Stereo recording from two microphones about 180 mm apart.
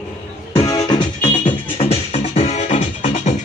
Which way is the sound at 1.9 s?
35° left (ahead or behind).